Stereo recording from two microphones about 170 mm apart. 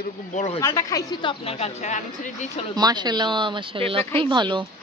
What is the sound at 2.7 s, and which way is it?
Speech, 25° right (ahead or behind).